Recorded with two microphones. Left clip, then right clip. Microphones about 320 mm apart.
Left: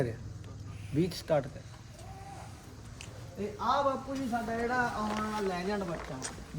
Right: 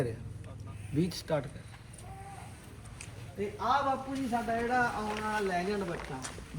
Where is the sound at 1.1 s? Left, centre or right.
Centre.